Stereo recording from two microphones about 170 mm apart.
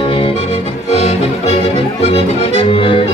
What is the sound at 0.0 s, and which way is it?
Music, 30° left (ahead or behind).